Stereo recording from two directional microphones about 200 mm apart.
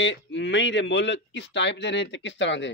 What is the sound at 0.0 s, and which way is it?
Speech, 65° left (ahead or behind).